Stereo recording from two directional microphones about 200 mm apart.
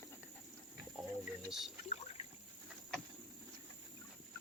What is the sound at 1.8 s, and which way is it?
Rowboat, 35° left (ahead or behind).